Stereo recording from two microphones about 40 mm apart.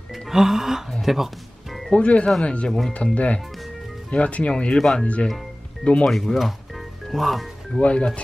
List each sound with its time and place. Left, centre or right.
0.3 s music: centre
1.9 s speech: left
6.0 s speech: centre
7.8 s speech: left